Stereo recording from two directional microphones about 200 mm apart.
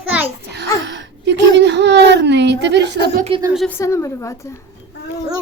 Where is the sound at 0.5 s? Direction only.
60° right (ahead or behind).